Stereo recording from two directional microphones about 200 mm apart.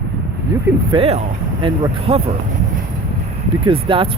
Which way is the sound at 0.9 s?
30° right (ahead or behind).